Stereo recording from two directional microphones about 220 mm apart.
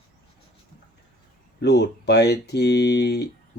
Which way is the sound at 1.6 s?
50° left (ahead or behind).